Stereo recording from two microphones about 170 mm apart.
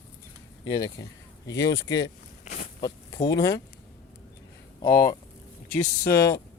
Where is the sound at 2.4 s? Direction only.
50° left (ahead or behind).